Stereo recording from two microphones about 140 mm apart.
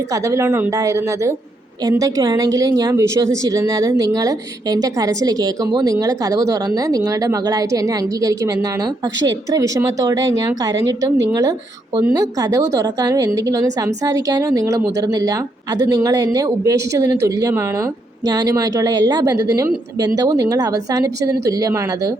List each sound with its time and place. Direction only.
0.1 s speech: 20° right (ahead or behind)